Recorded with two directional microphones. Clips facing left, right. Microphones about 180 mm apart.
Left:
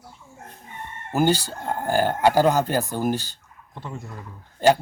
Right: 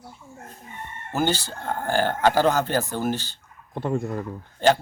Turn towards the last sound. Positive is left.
turn(degrees=10)  # may be behind; listen again after turning